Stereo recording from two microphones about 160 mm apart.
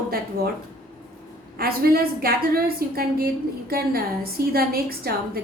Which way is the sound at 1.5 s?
70° right (ahead or behind).